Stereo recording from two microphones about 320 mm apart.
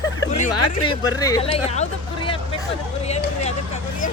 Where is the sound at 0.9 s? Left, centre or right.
Centre.